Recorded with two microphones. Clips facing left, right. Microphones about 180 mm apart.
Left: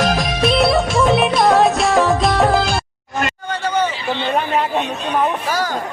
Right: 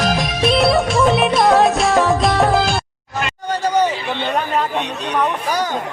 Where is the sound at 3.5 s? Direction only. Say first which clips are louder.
Right 4 dB; 40° right (ahead or behind).